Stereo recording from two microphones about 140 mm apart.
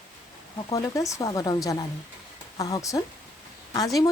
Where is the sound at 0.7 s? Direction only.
25° left (ahead or behind).